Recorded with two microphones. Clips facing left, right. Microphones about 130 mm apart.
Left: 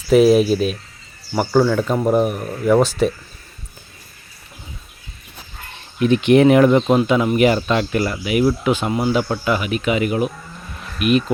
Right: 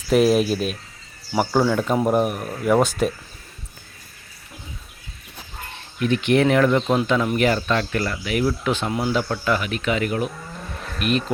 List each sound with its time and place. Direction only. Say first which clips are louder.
0.1 s speech: left 5 dB; centre (ahead or behind)
6.0 s speech: left 6 dB; 20° left (ahead or behind)